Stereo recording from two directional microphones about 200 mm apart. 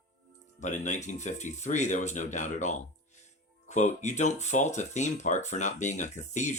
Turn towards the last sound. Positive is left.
turn(degrees=35)  # may be behind; listen again after turning